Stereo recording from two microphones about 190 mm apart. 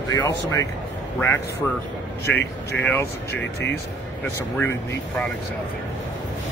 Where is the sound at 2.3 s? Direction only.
5° left (ahead or behind).